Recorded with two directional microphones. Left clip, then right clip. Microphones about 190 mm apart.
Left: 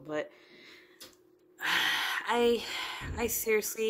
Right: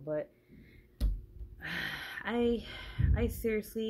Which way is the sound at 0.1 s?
20° left (ahead or behind).